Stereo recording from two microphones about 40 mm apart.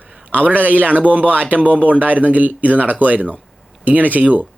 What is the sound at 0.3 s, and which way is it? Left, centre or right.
A man's voice, right.